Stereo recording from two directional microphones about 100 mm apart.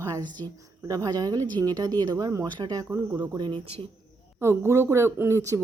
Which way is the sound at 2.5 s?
50° right (ahead or behind).